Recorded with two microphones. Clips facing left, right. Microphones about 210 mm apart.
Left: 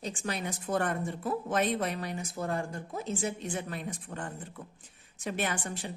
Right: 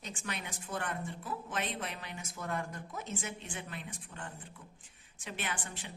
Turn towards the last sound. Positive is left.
turn(degrees=40)  # may be behind; listen again after turning